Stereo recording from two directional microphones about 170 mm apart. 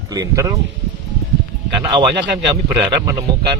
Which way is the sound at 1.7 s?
30° right (ahead or behind).